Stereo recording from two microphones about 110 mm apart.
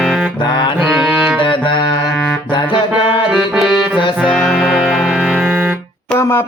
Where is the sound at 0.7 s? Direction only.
5° right (ahead or behind).